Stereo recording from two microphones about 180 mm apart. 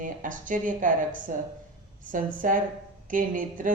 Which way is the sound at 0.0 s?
45° right (ahead or behind).